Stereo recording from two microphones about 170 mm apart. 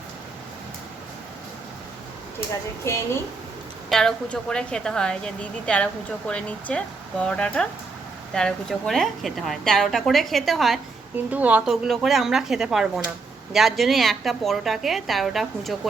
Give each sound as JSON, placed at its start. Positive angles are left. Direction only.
{"t": 2.8, "sound": "a woman's voice", "side_deg": 15}
{"t": 3.8, "sound": "a woman's voice", "side_deg": 5}